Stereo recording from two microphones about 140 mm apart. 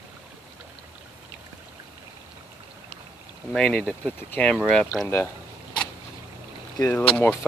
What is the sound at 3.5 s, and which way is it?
Speech, 5° left (ahead or behind).